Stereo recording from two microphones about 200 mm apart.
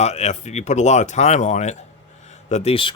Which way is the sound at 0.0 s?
35° left (ahead or behind).